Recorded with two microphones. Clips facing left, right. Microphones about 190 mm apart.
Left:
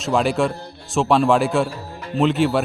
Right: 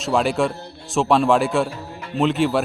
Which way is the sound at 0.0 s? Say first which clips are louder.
Left 1 dB; centre (ahead or behind).